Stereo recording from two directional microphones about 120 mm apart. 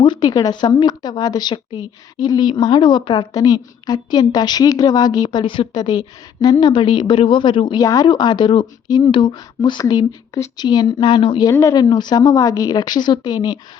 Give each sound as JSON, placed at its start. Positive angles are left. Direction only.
{"t": 0.0, "sound": "a woman's voice", "side_deg": 35}